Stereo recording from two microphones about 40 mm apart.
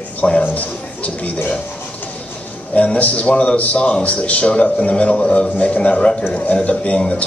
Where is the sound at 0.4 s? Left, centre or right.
Left.